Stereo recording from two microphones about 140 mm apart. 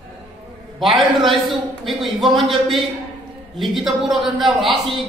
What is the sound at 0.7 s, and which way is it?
A man's voice, centre (ahead or behind).